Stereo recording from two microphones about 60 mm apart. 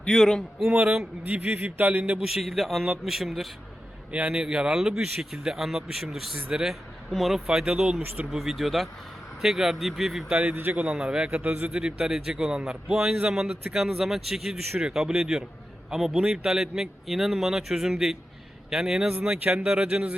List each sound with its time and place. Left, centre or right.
0.0 s a man's voice: centre
1.6 s speech: right
2.1 s a man's voice: centre
4.1 s speech: centre
7.4 s speech: centre
8.0 s speech: right
8.3 s a man's voice: centre
10.3 s speech: right
10.9 s speech: centre
11.4 s speech: right
11.7 s a man's voice: centre